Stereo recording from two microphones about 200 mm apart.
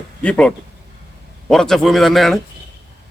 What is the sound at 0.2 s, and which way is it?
A man's voice, 5° left (ahead or behind).